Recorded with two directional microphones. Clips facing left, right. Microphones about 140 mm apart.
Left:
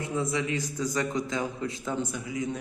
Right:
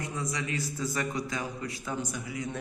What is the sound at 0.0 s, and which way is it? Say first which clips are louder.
A man's voice: left 5 dB; 25° left (ahead or behind).